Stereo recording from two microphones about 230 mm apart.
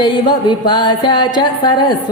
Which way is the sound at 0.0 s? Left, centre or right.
Left.